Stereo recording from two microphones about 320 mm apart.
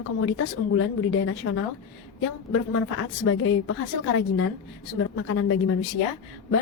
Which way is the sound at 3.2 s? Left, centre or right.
Left.